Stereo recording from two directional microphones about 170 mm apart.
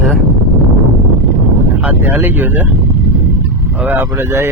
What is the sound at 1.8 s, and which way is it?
Speech, 10° right (ahead or behind).